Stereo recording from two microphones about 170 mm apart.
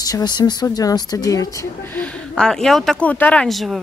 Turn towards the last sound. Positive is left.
turn(degrees=0)  # may be behind; listen again after turning